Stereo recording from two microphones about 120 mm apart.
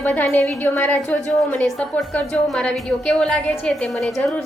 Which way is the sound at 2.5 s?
5° left (ahead or behind).